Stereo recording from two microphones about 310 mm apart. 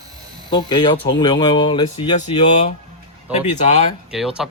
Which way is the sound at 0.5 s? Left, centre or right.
Centre.